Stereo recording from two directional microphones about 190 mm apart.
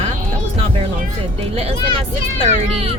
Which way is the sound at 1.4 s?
30° right (ahead or behind).